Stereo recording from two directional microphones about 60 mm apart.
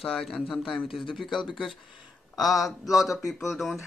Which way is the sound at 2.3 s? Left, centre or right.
Left.